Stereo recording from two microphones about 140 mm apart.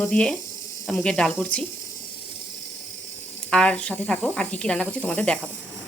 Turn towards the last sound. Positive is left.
turn(degrees=10)  # may be behind; listen again after turning